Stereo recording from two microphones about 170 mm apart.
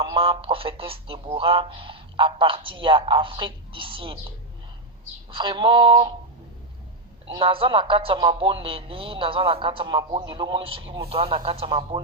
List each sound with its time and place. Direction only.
0.0 s speech: 30° right (ahead or behind)
5.3 s a sound: 30° right (ahead or behind)
7.3 s speech: 30° right (ahead or behind)